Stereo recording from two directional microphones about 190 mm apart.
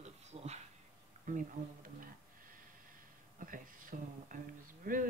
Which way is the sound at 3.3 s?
45° right (ahead or behind).